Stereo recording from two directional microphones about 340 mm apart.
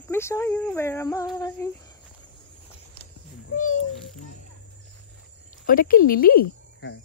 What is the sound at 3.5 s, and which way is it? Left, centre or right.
Speech, left.